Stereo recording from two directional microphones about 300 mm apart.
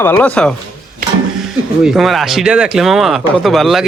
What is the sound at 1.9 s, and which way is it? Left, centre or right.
Speech, centre.